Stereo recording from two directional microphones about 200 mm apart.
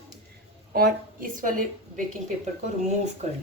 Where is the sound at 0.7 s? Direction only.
45° right (ahead or behind).